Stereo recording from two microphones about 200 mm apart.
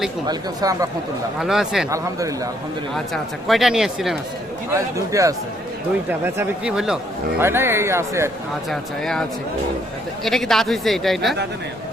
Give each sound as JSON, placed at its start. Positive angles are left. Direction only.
{"t": 0.3, "sound": "speech", "side_deg": -20}
{"t": 1.4, "sound": "speech", "side_deg": 0}
{"t": 1.9, "sound": "speech", "side_deg": -15}
{"t": 2.9, "sound": "speech", "side_deg": 0}
{"t": 4.7, "sound": "speech", "side_deg": -15}
{"t": 8.7, "sound": "speech", "side_deg": 0}
{"t": 10.2, "sound": "speech", "side_deg": 0}